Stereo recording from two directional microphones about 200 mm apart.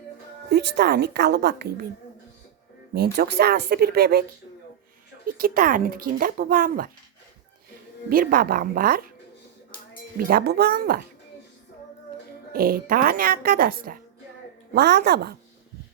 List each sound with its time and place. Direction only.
0.5 s a woman's voice: 55° right (ahead or behind)
2.9 s a woman's voice: 55° right (ahead or behind)
5.4 s a woman's voice: 45° right (ahead or behind)
8.1 s a woman's voice: 45° right (ahead or behind)
10.2 s a woman's voice: 50° right (ahead or behind)
12.5 s a woman's voice: 45° right (ahead or behind)